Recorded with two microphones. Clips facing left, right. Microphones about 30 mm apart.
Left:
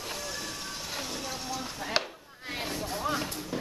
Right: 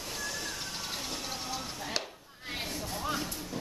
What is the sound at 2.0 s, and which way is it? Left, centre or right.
Chop, left.